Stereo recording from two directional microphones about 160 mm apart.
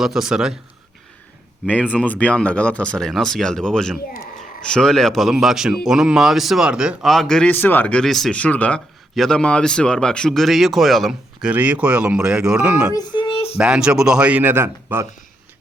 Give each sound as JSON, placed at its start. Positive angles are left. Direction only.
{"t": 0.0, "sound": "a man's voice", "side_deg": 0}
{"t": 1.9, "sound": "a man's voice", "side_deg": 10}
{"t": 12.9, "sound": "a sound", "side_deg": 25}
{"t": 13.6, "sound": "speech", "side_deg": -5}